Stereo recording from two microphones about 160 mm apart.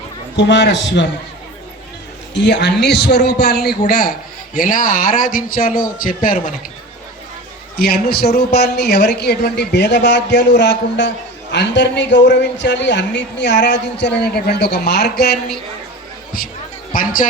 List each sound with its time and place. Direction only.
0.3 s a man's voice: 90° left
2.3 s a man's voice: 90° left; by 6.5 s 60° left (ahead or behind)
7.8 s a man's voice: 75° left (ahead or behind)
16.9 s a man's voice: 60° left (ahead or behind)